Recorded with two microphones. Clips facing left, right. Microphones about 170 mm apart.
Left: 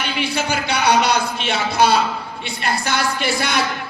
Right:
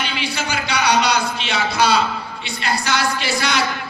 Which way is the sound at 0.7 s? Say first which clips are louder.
Left 1 dB; 55° left (ahead or behind).